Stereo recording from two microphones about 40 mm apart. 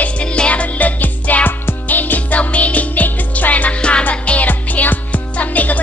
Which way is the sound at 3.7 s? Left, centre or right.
Left.